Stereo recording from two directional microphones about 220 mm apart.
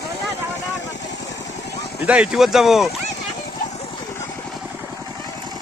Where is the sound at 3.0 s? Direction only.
30° left (ahead or behind).